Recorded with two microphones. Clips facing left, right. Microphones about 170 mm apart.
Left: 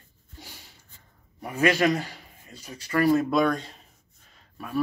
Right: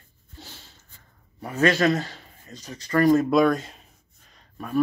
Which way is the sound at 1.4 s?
10° left (ahead or behind).